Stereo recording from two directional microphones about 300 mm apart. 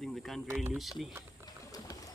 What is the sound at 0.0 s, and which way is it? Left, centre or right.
Speech, centre.